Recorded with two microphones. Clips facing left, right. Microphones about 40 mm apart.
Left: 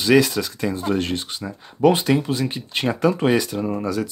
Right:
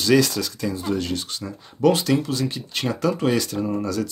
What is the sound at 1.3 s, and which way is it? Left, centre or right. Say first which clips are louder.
Speech: left 1 dB; centre.